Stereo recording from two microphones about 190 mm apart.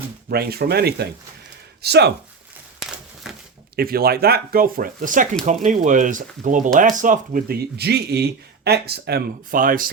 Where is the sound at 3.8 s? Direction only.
55° right (ahead or behind).